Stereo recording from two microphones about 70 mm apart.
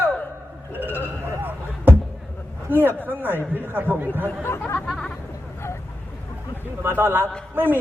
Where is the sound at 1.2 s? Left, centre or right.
Right.